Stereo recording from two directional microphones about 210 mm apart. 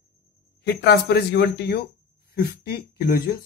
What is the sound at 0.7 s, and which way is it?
Speech, 50° left (ahead or behind).